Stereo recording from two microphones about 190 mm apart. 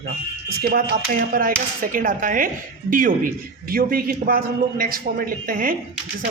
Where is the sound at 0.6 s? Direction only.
55° right (ahead or behind).